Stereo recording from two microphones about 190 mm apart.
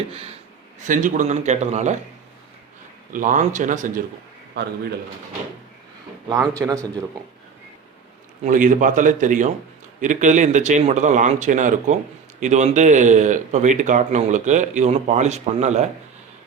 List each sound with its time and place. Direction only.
0.1 s speech: 30° right (ahead or behind)
3.1 s speech: 45° right (ahead or behind)
6.2 s a man's voice: 15° right (ahead or behind)
8.4 s speech: 45° right (ahead or behind)